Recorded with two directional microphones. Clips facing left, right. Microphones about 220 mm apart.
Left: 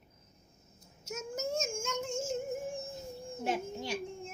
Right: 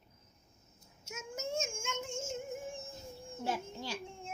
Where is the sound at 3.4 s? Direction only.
20° left (ahead or behind).